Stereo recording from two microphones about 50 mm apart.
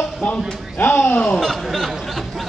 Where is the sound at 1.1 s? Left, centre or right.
Left.